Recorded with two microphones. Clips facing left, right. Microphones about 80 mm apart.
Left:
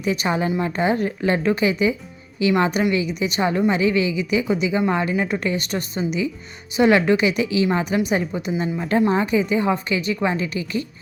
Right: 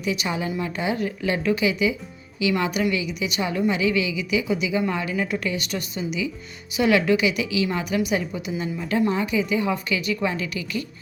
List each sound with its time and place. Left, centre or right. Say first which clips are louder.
0.0 s a woman's voice: left 4 dB; left